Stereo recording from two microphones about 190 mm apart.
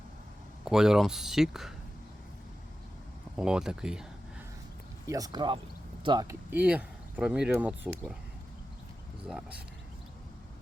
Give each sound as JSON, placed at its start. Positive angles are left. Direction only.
{"t": 0.6, "sound": "speech", "side_deg": -5}
{"t": 3.3, "sound": "speech", "side_deg": -5}
{"t": 5.0, "sound": "speech", "side_deg": -20}
{"t": 6.5, "sound": "speech", "side_deg": -10}
{"t": 9.2, "sound": "speech", "side_deg": -5}